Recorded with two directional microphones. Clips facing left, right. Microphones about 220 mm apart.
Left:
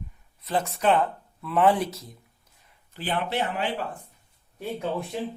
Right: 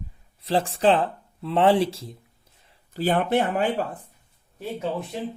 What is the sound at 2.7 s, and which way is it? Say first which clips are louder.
Speech: right 7 dB; 40° right (ahead or behind).